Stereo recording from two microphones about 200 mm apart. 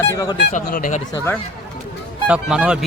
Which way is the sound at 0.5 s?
40° left (ahead or behind).